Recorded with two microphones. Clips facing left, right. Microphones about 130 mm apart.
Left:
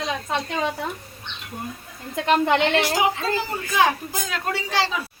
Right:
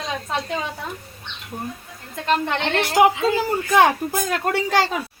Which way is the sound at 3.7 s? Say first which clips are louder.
Right 4 dB; 60° right (ahead or behind).